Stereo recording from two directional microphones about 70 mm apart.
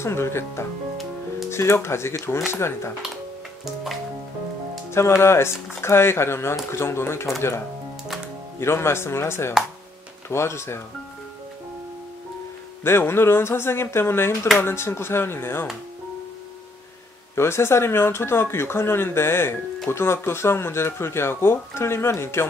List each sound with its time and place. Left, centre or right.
0.0 s speech: left
4.9 s speech: left
8.5 s speech: left
12.8 s speech: left
17.4 s speech: left